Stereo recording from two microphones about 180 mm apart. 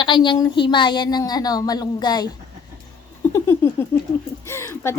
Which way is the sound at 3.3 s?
15° left (ahead or behind).